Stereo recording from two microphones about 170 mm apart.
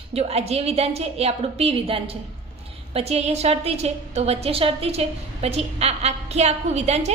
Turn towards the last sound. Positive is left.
turn(degrees=-40)  # may be behind; listen again after turning